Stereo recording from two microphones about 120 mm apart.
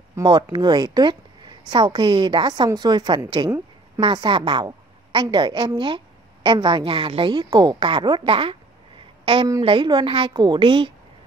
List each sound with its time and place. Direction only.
0.2 s a woman's voice: 40° right (ahead or behind)